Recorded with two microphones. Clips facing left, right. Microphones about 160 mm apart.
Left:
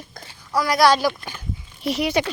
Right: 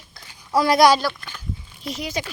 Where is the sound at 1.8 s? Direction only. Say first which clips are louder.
Left 7 dB; 70° left (ahead or behind).